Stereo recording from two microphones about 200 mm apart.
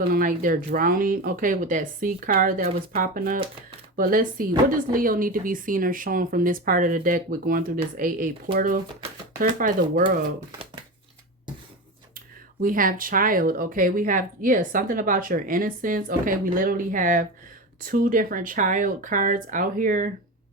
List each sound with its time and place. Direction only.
0.1 s speech: 45° right (ahead or behind)
12.6 s speech: 45° right (ahead or behind)